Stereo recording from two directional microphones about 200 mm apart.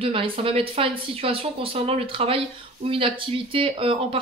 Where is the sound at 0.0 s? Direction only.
25° right (ahead or behind).